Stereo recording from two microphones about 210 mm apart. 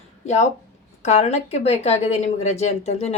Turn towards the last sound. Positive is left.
turn(degrees=30)  # may be behind; listen again after turning